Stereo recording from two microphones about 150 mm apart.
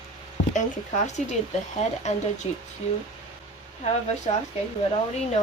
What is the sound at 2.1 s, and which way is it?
Speech, 50° left (ahead or behind).